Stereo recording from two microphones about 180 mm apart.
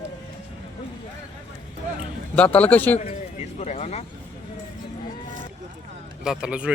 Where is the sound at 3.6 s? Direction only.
40° left (ahead or behind).